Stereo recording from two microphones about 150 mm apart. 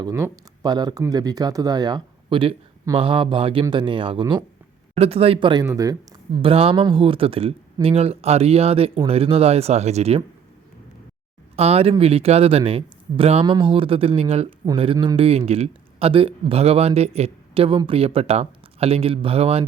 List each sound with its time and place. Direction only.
0.6 s speech: 30° right (ahead or behind)
5.6 s speech: 20° right (ahead or behind)
6.4 s speech: 40° right (ahead or behind)
11.5 s speech: 45° right (ahead or behind)